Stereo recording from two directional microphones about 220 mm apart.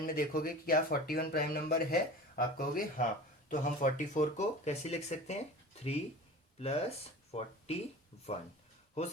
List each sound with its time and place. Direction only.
0.0 s speech: 40° left (ahead or behind)
6.6 s speech: 25° left (ahead or behind)